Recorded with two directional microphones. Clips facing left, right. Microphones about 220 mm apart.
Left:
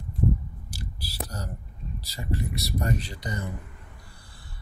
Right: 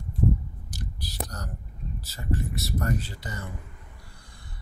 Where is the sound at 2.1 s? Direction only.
15° left (ahead or behind).